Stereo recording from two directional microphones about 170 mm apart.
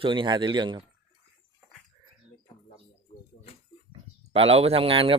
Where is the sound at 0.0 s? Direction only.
30° right (ahead or behind).